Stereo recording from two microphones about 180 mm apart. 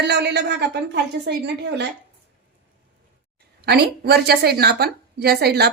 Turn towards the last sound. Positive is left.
turn(degrees=-65)  # may be behind; listen again after turning